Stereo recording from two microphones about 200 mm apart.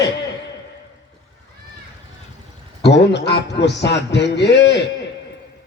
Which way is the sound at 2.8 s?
60° left (ahead or behind).